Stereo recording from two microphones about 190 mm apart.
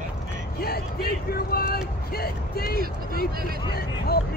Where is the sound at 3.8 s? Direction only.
55° left (ahead or behind).